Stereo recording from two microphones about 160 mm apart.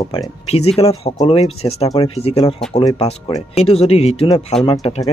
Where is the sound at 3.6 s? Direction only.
40° left (ahead or behind).